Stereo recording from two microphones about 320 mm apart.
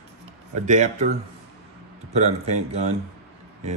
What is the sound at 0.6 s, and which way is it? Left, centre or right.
Speech, right.